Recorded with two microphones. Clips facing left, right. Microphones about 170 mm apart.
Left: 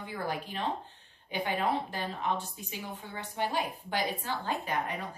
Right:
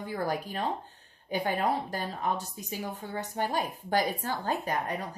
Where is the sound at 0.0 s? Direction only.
45° right (ahead or behind).